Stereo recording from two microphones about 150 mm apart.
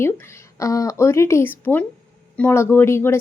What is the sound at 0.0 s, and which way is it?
A woman's voice, 15° left (ahead or behind).